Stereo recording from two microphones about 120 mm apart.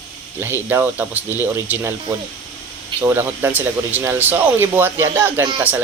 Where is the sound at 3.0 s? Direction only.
20° right (ahead or behind).